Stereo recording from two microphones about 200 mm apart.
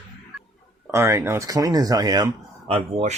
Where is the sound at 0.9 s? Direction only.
15° right (ahead or behind).